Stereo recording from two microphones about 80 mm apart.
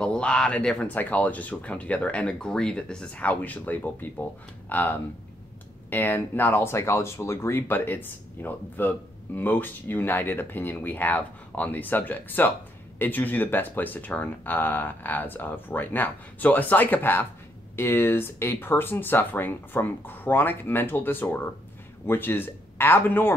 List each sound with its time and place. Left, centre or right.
0.0 s speech: centre